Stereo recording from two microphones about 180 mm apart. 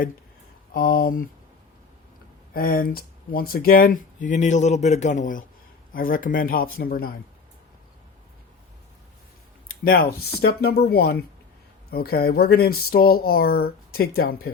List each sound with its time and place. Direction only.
0.7 s speech: 50° left (ahead or behind)
2.5 s speech: 55° left (ahead or behind)
9.6 s speech: 55° left (ahead or behind)